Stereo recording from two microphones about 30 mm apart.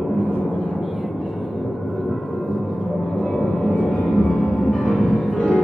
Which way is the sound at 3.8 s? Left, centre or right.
Left.